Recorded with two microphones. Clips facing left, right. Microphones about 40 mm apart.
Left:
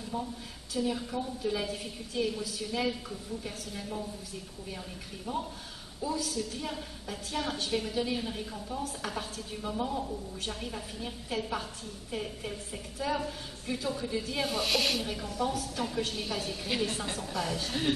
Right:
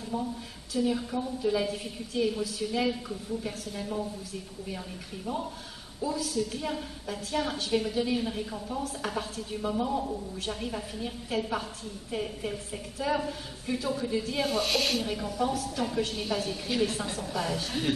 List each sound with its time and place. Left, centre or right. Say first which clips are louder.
0.7 s a woman's voice: right 3 dB; centre
6.0 s a woman's voice: right 3 dB; centre